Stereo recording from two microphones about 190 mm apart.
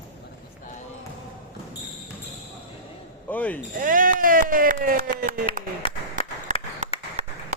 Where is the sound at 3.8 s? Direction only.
45° right (ahead or behind).